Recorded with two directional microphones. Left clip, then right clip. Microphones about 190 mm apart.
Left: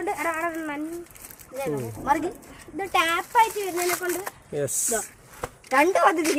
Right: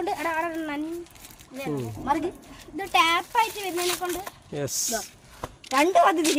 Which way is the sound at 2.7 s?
60° right (ahead or behind).